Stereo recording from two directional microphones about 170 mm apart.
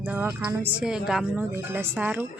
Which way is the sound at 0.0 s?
10° right (ahead or behind).